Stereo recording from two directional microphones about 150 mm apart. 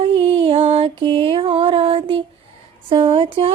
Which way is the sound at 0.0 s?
40° right (ahead or behind).